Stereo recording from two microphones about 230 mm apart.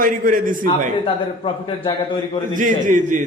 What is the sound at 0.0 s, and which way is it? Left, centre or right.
Speech, right.